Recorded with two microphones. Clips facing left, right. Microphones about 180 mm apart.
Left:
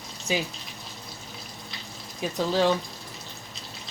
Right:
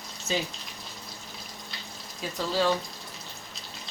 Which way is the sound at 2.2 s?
20° left (ahead or behind).